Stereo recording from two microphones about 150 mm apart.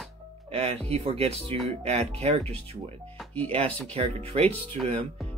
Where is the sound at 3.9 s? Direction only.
40° right (ahead or behind).